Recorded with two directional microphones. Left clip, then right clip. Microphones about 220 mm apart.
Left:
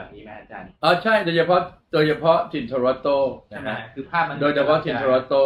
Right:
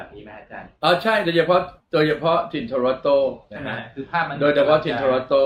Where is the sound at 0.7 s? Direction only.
10° right (ahead or behind).